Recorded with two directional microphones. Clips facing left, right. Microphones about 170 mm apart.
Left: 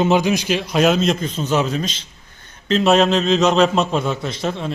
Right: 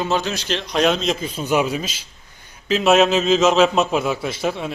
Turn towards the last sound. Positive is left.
turn(degrees=-5)  # may be behind; listen again after turning